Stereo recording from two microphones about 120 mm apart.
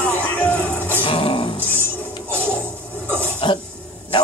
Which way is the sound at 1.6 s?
20° right (ahead or behind).